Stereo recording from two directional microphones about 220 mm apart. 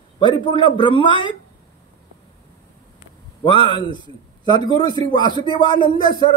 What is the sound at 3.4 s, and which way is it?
A man's voice, 20° left (ahead or behind).